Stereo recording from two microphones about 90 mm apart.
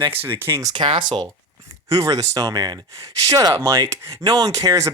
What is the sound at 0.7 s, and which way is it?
Speech, 60° right (ahead or behind).